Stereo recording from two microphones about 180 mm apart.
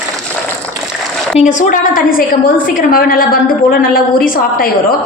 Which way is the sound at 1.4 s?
45° left (ahead or behind).